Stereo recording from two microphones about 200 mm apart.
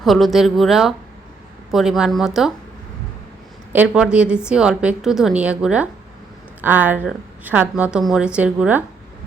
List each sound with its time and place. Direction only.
0.0 s a woman's voice: centre (ahead or behind)
3.7 s a woman's voice: 5° right (ahead or behind)